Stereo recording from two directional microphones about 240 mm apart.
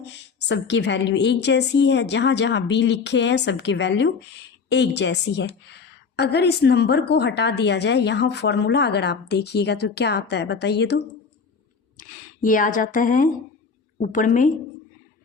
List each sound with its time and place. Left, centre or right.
0.1 s a woman's voice: left
11.9 s speech: left